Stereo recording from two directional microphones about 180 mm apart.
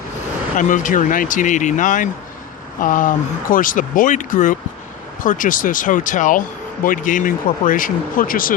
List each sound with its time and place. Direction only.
0.5 s speech: 45° left (ahead or behind)